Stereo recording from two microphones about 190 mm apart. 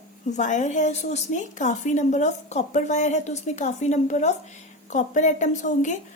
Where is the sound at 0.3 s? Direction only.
40° left (ahead or behind).